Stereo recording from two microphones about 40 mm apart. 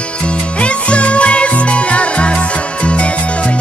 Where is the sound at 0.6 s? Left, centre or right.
Left.